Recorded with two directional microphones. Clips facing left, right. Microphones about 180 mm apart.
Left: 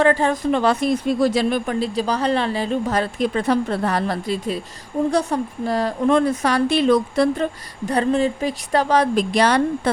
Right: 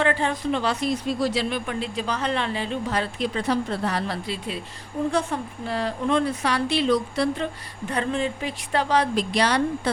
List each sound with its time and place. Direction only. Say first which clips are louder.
0.0 s speech: left 6 dB; 40° left (ahead or behind)
7.9 s speech: left 7 dB; 40° left (ahead or behind)